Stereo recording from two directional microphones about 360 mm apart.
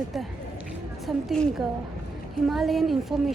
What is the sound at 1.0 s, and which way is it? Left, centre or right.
A woman's voice, centre.